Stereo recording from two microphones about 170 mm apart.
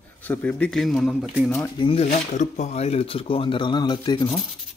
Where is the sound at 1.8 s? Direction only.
35° left (ahead or behind).